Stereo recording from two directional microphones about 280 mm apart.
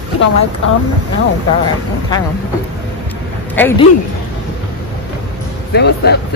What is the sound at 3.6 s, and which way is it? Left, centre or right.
Speech, centre.